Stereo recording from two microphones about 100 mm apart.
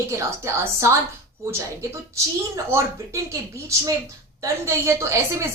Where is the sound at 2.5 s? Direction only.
30° right (ahead or behind).